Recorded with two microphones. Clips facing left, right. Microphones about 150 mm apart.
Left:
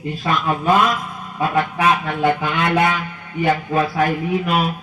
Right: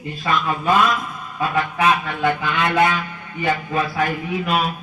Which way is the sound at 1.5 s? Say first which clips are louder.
Left 1 dB; 35° left (ahead or behind).